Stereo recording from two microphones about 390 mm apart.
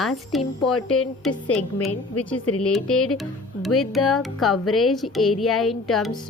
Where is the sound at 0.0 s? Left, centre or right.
Centre.